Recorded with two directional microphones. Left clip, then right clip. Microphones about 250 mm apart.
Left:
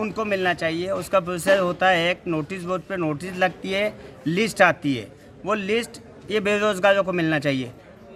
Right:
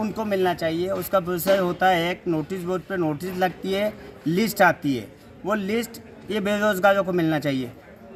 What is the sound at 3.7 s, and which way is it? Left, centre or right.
A man's voice, centre.